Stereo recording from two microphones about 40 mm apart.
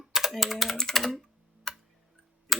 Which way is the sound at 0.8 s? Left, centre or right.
Centre.